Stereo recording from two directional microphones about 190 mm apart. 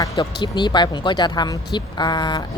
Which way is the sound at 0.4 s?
25° left (ahead or behind).